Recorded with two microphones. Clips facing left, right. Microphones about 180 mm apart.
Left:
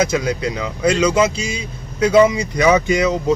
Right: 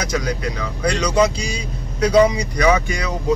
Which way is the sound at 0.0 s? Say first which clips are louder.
Left 5 dB; 25° left (ahead or behind).